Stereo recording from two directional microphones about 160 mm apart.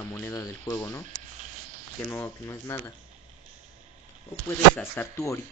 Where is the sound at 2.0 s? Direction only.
15° left (ahead or behind).